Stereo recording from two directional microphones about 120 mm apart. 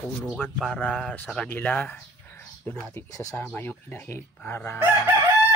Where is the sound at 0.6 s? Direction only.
5° left (ahead or behind).